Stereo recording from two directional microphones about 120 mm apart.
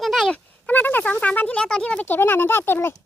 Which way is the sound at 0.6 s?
15° left (ahead or behind).